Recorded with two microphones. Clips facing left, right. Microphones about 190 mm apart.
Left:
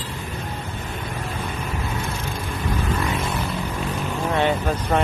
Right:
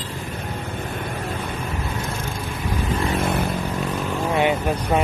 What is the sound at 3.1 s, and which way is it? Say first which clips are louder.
Vehicle: right 4 dB; 55° right (ahead or behind).